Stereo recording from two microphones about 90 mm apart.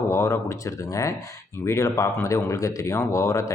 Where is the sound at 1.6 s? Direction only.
35° left (ahead or behind).